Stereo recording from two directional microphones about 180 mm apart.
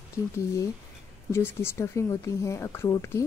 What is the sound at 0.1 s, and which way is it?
A woman's voice, 15° left (ahead or behind).